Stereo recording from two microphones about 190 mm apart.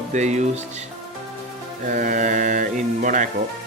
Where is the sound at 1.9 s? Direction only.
45° right (ahead or behind).